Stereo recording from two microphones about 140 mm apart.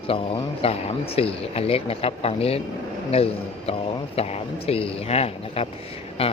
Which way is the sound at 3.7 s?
45° left (ahead or behind).